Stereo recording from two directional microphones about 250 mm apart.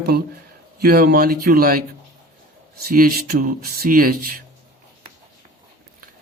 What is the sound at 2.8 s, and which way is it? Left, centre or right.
Speech, right.